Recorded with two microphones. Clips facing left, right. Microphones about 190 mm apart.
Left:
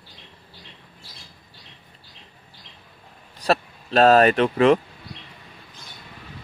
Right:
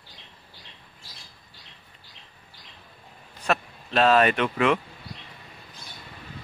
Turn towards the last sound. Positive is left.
turn(degrees=35)  # may be behind; listen again after turning